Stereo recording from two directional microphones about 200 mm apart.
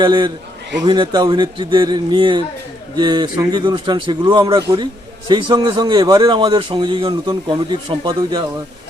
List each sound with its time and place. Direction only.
0.0 s a man's voice: 20° right (ahead or behind)